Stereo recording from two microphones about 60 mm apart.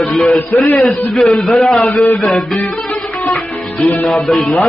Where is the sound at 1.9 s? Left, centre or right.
Left.